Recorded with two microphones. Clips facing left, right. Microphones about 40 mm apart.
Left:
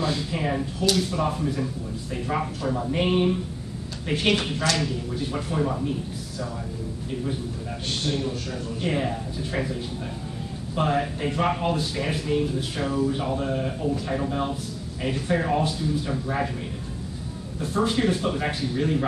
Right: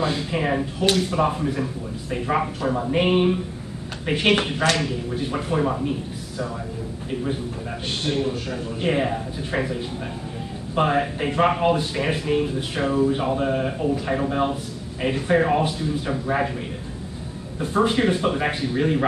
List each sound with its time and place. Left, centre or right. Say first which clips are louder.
0.0 s speech: right 3 dB; right
8.0 s speech: right 4 dB; right
10.8 s speech: right 3 dB; right
17.6 s speech: right 4 dB; right